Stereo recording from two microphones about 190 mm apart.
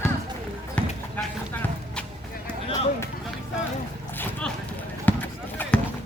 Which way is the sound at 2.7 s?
15° left (ahead or behind).